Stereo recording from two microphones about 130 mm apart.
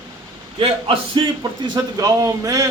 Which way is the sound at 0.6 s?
40° right (ahead or behind).